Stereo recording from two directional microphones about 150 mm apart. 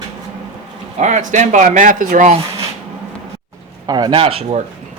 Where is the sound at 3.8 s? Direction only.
25° right (ahead or behind).